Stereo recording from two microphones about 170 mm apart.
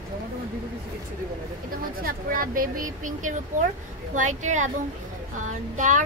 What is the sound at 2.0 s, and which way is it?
Speech, 55° right (ahead or behind).